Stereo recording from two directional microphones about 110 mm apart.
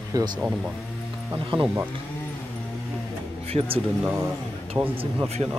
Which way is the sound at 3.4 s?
60° right (ahead or behind).